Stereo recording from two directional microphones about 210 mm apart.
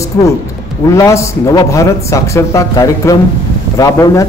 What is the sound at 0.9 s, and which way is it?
Speech, 15° left (ahead or behind).